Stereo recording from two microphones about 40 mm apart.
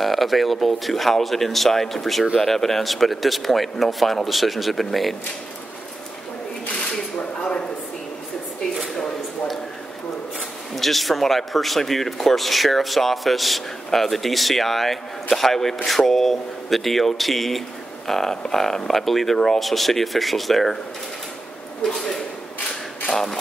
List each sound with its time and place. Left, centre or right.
0.0 s speech: centre
10.8 s speech: centre
21.8 s speech: centre
23.0 s a sound: centre